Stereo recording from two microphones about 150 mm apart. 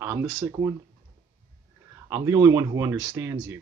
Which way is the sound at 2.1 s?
20° right (ahead or behind).